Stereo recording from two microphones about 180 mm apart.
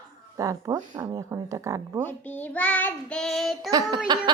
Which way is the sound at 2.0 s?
10° left (ahead or behind).